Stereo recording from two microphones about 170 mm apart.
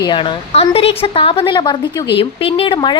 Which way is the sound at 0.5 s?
35° left (ahead or behind).